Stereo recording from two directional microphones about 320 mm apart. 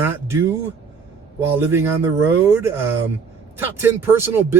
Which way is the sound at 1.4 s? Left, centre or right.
Centre.